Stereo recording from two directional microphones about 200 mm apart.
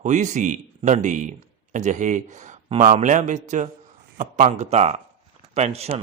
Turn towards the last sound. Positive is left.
turn(degrees=-30)  # may be behind; listen again after turning